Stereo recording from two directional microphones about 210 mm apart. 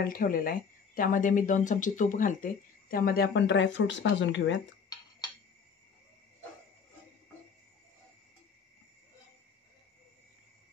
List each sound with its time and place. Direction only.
0.0 s speech: 45° left (ahead or behind); by 4.6 s 60° left (ahead or behind)